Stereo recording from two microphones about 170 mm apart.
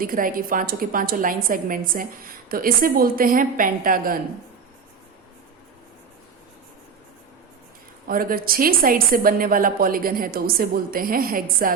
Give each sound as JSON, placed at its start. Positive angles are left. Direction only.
{"t": 0.0, "sound": "a woman's voice", "side_deg": -55}
{"t": 8.0, "sound": "a woman's voice", "side_deg": -60}